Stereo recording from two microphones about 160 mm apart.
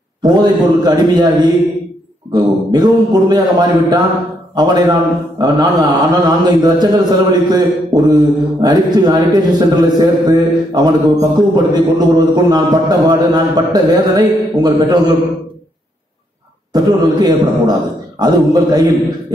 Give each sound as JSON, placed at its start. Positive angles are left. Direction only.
{"t": 0.2, "sound": "a man's voice", "side_deg": -25}
{"t": 16.7, "sound": "a man's voice", "side_deg": -25}